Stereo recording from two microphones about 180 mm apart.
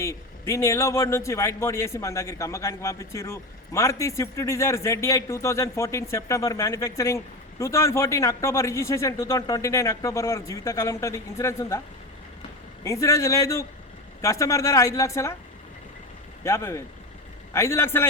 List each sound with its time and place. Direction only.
0.0 s a man's voice: 15° left (ahead or behind)
12.8 s a man's voice: 15° left (ahead or behind)
16.4 s a man's voice: 15° left (ahead or behind)